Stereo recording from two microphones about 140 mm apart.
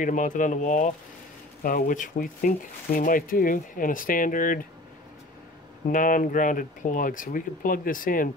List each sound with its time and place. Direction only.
0.0 s speech: 65° left (ahead or behind)
1.6 s speech: 85° left
5.9 s speech: 70° left (ahead or behind)